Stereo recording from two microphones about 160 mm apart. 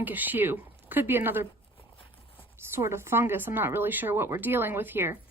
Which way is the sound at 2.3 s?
35° left (ahead or behind).